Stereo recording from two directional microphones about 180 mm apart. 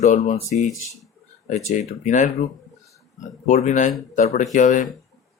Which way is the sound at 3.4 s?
40° left (ahead or behind).